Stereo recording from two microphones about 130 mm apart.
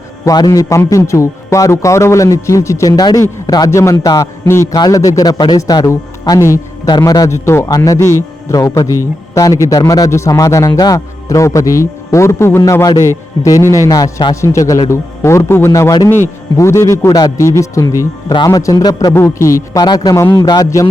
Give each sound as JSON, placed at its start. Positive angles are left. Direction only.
{"t": 0.3, "sound": "a man's voice", "side_deg": 30}